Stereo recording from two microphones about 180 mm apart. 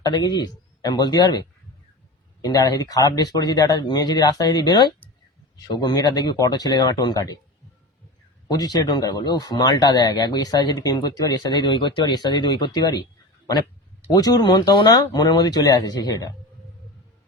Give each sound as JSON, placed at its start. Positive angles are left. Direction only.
{"t": 0.0, "sound": "speech", "side_deg": 20}
{"t": 8.4, "sound": "speech", "side_deg": 20}
{"t": 14.1, "sound": "speech", "side_deg": 20}